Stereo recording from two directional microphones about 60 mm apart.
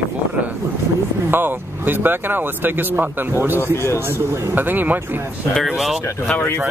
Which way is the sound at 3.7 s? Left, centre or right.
Left.